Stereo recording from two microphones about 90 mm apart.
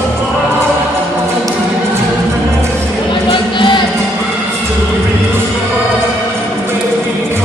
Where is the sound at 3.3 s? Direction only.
60° left (ahead or behind).